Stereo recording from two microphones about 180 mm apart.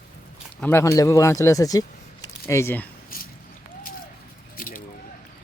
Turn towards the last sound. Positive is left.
turn(degrees=50)  # may be behind; listen again after turning